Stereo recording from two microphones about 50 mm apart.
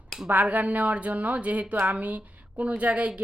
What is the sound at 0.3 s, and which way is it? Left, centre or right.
A woman's voice, right.